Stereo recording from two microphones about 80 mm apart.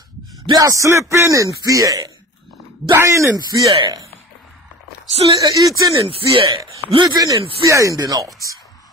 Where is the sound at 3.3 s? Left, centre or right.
Right.